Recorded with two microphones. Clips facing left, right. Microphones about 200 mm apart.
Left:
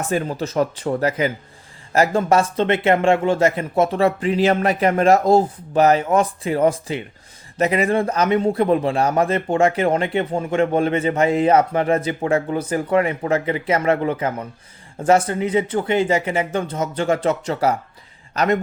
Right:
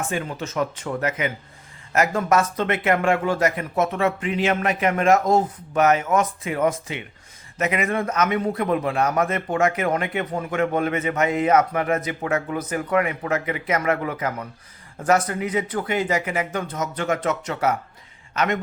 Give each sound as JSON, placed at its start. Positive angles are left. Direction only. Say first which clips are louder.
{"t": 0.0, "sound": "a man's voice", "louder": "left 5 dB", "side_deg": 35}